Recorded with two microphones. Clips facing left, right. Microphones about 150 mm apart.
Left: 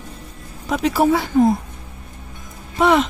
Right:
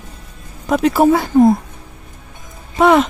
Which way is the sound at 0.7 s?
50° right (ahead or behind).